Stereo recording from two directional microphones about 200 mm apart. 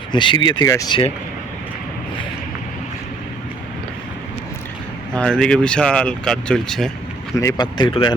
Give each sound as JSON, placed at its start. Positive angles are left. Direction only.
{"t": 0.1, "sound": "speech", "side_deg": 25}
{"t": 5.1, "sound": "speech", "side_deg": 5}
{"t": 7.3, "sound": "speech", "side_deg": 20}